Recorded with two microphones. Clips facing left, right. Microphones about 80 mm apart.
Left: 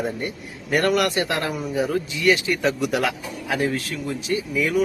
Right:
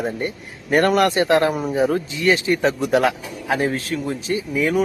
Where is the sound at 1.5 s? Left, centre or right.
Right.